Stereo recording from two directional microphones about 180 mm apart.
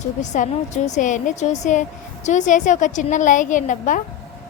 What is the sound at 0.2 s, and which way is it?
A woman's voice, 40° left (ahead or behind).